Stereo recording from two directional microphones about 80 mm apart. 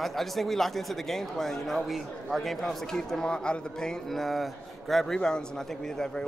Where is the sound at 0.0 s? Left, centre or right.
Centre.